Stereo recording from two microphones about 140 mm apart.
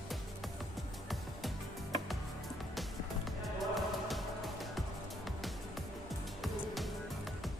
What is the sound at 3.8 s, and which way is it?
Music, centre (ahead or behind).